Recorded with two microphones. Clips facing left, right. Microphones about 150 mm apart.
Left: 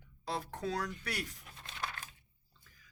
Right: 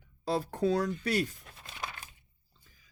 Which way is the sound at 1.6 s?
10° right (ahead or behind).